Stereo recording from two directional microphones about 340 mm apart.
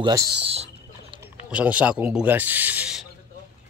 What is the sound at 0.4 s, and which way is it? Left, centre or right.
Speech, centre.